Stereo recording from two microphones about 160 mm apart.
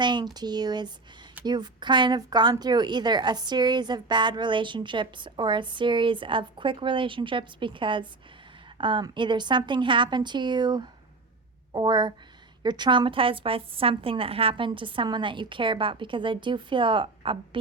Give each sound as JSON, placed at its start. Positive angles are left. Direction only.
{"t": 0.0, "sound": "a woman's voice", "side_deg": -30}